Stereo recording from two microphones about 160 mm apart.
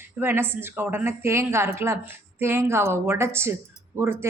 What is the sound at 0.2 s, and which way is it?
Speech, 15° right (ahead or behind).